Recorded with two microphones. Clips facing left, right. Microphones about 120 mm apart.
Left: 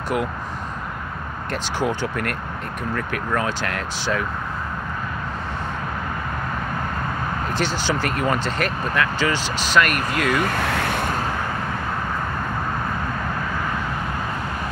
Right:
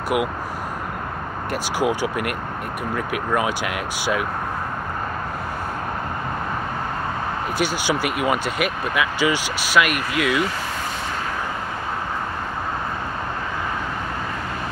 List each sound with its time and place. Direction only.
1.5 s speech: 10° right (ahead or behind)
7.5 s speech: 10° right (ahead or behind)
10.3 s speech: 55° left (ahead or behind)